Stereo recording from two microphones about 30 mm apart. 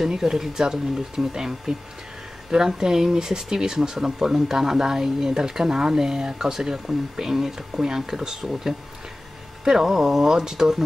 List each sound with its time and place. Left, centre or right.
0.1 s speech: centre